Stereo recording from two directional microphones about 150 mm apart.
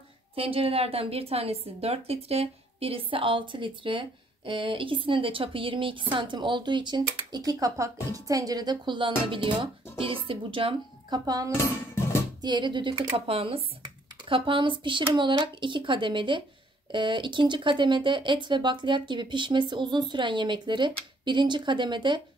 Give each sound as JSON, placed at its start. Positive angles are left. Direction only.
{"t": 0.4, "sound": "a woman's voice", "side_deg": -40}
{"t": 11.5, "sound": "dishes", "side_deg": 15}
{"t": 12.4, "sound": "a woman's voice", "side_deg": -30}